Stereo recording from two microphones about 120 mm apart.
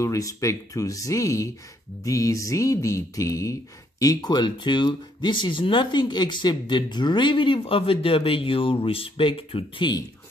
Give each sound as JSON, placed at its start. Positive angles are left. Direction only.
{"t": 0.0, "sound": "speech", "side_deg": 25}